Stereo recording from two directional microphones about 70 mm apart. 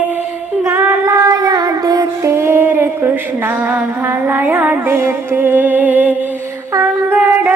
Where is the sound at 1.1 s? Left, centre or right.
Right.